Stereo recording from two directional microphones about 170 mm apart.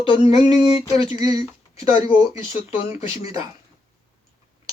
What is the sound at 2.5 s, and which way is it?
Speech, 35° left (ahead or behind).